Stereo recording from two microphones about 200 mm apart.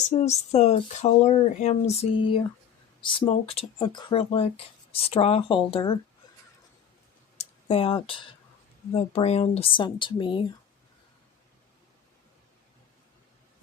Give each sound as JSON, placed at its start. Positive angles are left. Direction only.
{"t": 0.1, "sound": "speech", "side_deg": 30}
{"t": 7.3, "sound": "a sound", "side_deg": 30}
{"t": 8.9, "sound": "speech", "side_deg": 30}